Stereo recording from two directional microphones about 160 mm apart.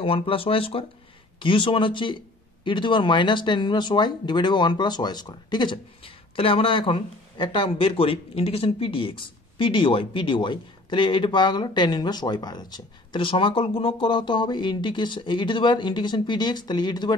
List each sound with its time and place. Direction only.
0.0 s speech: 35° left (ahead or behind)